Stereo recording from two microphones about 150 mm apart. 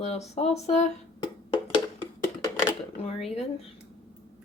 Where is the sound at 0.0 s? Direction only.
45° left (ahead or behind).